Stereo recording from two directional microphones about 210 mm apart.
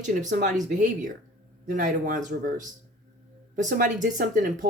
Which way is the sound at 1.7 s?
40° right (ahead or behind).